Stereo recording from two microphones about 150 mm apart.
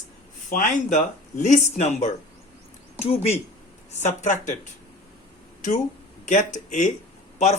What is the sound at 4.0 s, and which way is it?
Speech, 50° left (ahead or behind).